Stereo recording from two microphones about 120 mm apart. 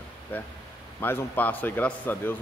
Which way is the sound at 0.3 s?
15° left (ahead or behind).